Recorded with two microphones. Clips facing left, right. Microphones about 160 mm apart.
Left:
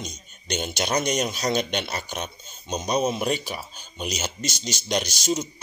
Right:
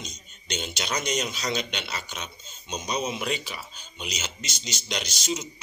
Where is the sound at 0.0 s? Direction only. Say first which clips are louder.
Left 5 dB; 50° left (ahead or behind).